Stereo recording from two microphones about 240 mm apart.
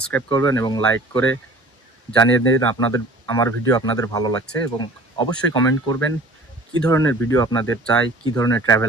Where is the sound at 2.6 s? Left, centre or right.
Centre.